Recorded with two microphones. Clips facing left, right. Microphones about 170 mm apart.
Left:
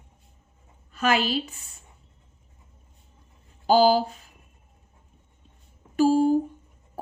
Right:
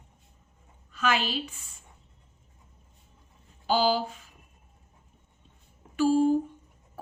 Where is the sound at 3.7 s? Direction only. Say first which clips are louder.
Left 6 dB; 40° left (ahead or behind).